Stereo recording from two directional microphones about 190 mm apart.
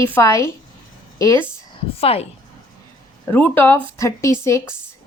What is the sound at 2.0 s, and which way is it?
Speech, 30° left (ahead or behind).